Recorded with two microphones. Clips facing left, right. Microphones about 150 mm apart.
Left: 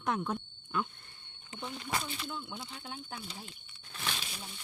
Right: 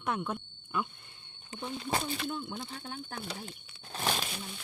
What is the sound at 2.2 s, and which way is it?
Speech, 50° right (ahead or behind).